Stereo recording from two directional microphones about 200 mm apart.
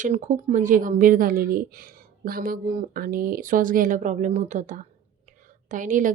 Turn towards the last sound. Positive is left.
turn(degrees=-40)  # may be behind; listen again after turning